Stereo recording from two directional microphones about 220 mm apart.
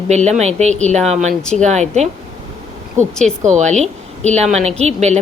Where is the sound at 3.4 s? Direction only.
30° right (ahead or behind).